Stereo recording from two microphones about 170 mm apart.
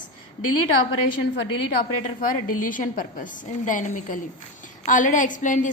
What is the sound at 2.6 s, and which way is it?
A woman's voice, 50° left (ahead or behind).